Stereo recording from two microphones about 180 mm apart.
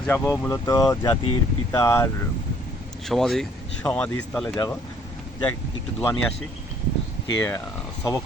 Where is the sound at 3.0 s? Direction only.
Centre (ahead or behind).